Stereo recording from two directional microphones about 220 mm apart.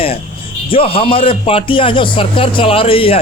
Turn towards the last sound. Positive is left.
turn(degrees=25)  # may be behind; listen again after turning